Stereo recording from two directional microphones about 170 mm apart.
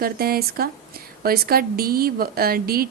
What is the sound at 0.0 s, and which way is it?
A woman's voice, 65° right (ahead or behind).